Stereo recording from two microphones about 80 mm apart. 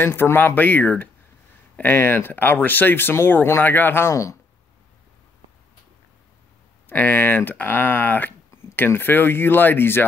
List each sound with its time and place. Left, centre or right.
0.0 s speech: left
6.9 s speech: left